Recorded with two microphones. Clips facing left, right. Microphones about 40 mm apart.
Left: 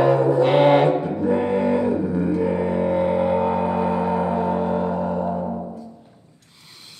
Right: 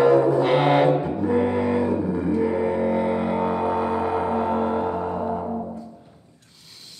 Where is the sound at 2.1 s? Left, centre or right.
Centre.